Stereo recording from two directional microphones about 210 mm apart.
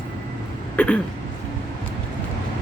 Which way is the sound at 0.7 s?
5° left (ahead or behind).